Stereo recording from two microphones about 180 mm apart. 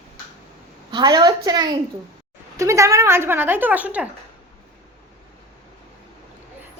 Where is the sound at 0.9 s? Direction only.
25° right (ahead or behind); by 4.1 s 10° right (ahead or behind).